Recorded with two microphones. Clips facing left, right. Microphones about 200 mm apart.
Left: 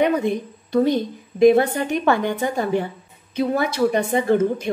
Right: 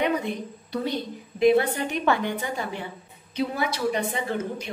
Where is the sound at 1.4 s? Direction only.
45° left (ahead or behind).